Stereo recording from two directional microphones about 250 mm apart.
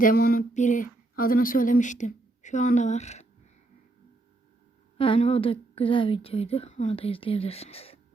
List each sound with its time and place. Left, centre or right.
0.0 s speech: left
4.9 s a woman's voice: left